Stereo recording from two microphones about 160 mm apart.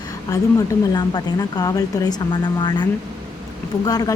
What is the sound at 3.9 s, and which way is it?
Speech, 25° left (ahead or behind).